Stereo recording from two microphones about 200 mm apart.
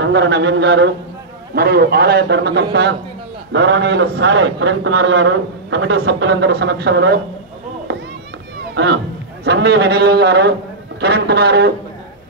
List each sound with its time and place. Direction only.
0.0 s a man's voice: 60° right (ahead or behind)
8.7 s a man's voice: 60° right (ahead or behind)